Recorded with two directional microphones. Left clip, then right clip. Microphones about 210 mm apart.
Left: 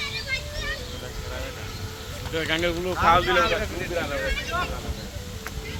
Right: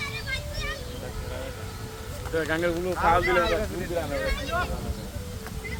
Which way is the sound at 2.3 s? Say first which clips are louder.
Left 1 dB; 30° right (ahead or behind).